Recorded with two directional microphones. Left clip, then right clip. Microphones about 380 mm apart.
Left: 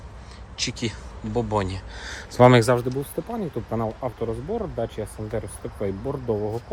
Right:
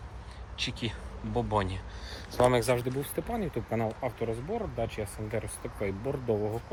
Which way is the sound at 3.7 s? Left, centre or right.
Centre.